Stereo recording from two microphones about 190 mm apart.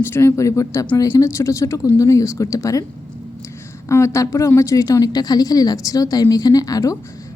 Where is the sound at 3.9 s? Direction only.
15° left (ahead or behind).